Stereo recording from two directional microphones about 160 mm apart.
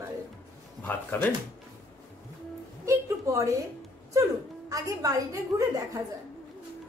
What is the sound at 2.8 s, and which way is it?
Speech, 20° right (ahead or behind).